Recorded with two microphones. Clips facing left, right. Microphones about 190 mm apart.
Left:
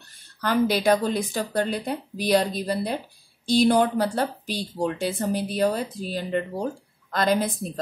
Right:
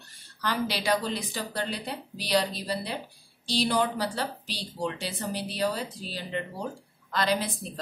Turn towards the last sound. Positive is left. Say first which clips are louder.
# left 5 dB
turn(degrees=45)  # may be behind; listen again after turning